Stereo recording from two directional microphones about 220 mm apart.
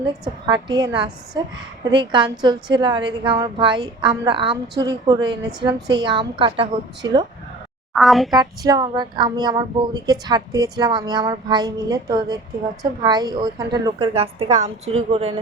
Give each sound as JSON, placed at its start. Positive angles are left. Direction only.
{"t": 0.4, "sound": "a woman's voice", "side_deg": -20}
{"t": 7.9, "sound": "speech", "side_deg": 0}
{"t": 8.3, "sound": "speech", "side_deg": -15}